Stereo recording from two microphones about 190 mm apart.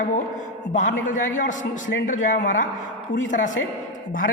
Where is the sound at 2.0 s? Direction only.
40° left (ahead or behind).